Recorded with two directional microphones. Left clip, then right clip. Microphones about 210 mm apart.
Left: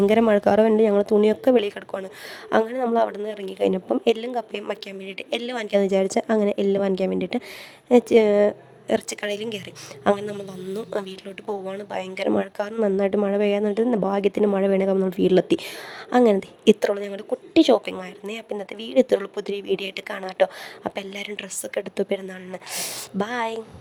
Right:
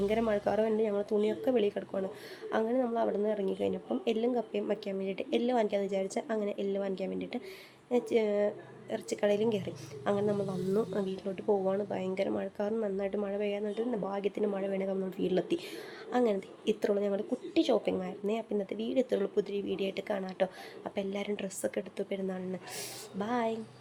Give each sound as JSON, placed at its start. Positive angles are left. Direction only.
{"t": 0.0, "sound": "a woman's voice", "side_deg": 50}